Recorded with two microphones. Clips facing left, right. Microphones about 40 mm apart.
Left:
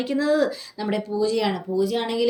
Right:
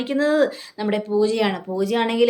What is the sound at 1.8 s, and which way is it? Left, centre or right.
Speech, right.